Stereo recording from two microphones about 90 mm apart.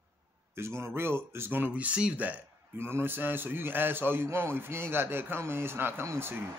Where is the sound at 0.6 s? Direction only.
30° right (ahead or behind); by 2.3 s 15° right (ahead or behind).